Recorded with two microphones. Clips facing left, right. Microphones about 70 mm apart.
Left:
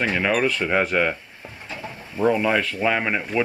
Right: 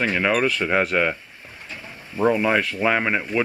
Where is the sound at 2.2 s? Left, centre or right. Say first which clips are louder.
Right 1 dB; centre.